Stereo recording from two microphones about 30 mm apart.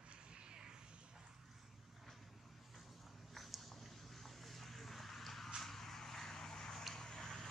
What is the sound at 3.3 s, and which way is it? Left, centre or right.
Vehicle, centre.